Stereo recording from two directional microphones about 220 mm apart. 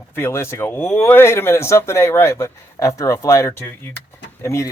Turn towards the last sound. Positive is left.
turn(degrees=15)  # may be behind; listen again after turning